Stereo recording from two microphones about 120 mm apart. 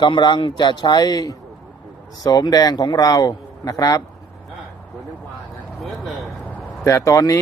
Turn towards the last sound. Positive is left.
turn(degrees=25)  # may be behind; listen again after turning